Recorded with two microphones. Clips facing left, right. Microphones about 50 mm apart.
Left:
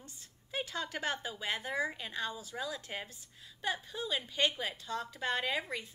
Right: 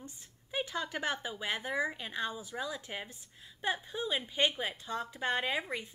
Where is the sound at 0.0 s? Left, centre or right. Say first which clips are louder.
Right 5 dB; centre.